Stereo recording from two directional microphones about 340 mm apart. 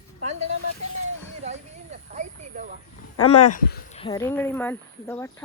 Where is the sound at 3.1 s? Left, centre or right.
Left.